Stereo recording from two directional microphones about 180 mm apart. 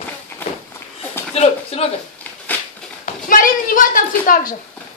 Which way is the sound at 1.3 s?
35° left (ahead or behind).